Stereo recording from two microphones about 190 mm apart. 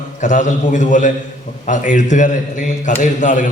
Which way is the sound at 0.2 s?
40° left (ahead or behind).